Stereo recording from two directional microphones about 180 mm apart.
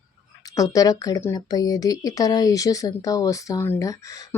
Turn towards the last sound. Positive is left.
turn(degrees=15)  # may be behind; listen again after turning